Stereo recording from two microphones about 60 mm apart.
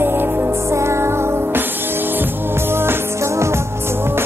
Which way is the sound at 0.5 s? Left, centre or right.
Right.